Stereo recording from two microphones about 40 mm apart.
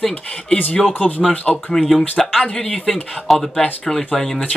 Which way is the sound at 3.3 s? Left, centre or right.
Centre.